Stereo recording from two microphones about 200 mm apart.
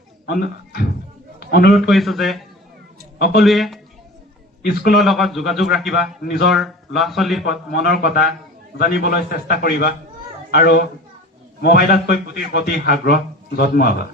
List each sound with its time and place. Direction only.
0.3 s a man's voice: 50° left (ahead or behind)
1.9 s speech: centre (ahead or behind)
3.4 s speech: centre (ahead or behind)
4.6 s a man's voice: 50° left (ahead or behind)
5.0 s speech: centre (ahead or behind)
7.7 s a man's voice: 50° left (ahead or behind)